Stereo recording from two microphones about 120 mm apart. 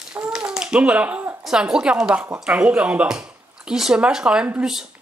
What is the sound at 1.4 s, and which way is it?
A man's voice, 5° right (ahead or behind).